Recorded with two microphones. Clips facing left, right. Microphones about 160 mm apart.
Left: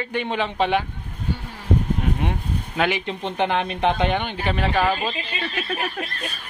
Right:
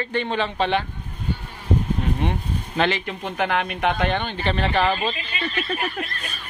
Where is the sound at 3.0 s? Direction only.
25° left (ahead or behind).